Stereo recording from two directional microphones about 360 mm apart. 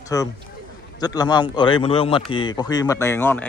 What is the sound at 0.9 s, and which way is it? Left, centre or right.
Speech, centre.